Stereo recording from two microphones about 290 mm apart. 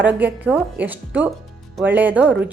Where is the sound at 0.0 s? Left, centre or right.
Centre.